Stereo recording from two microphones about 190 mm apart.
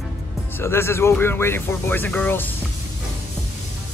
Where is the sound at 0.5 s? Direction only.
10° left (ahead or behind).